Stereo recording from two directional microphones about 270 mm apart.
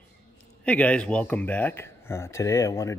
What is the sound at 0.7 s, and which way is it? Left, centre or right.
Speech, centre.